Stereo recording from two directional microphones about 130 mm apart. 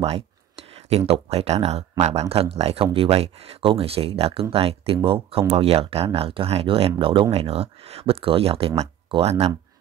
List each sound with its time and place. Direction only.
0.8 s speech: 50° right (ahead or behind)